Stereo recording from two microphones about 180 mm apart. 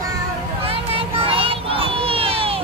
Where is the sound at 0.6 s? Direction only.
30° right (ahead or behind).